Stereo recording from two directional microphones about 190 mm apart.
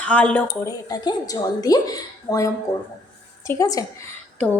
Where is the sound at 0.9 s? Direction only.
20° left (ahead or behind).